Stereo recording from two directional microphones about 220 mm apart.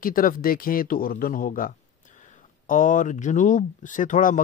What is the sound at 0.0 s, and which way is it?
Speech, 40° left (ahead or behind).